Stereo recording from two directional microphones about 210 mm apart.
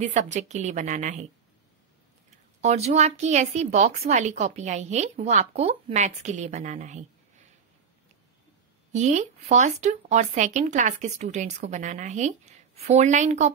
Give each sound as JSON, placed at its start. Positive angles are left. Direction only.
{"t": 0.0, "sound": "speech", "side_deg": -35}
{"t": 2.6, "sound": "speech", "side_deg": -30}
{"t": 8.9, "sound": "speech", "side_deg": -35}